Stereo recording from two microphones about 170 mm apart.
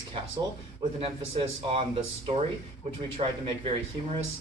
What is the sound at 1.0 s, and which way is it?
A man's voice, 35° right (ahead or behind).